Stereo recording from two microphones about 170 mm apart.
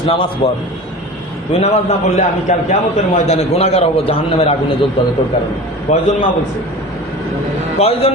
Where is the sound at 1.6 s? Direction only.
40° left (ahead or behind).